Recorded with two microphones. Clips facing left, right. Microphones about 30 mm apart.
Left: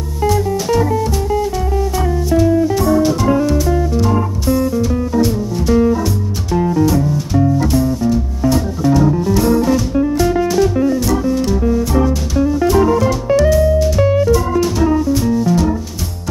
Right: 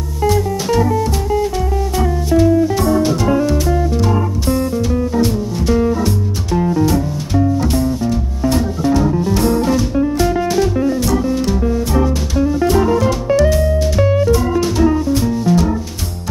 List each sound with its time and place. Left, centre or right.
0.7 s music: centre
13.5 s music: centre
14.0 s music: centre